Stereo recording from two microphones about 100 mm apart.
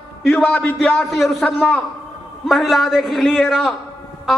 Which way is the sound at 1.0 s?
Centre (ahead or behind).